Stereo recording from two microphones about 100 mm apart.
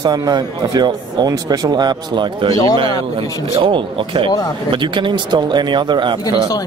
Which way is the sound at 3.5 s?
60° right (ahead or behind).